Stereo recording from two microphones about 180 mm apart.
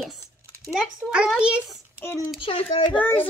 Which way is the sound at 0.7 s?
5° right (ahead or behind).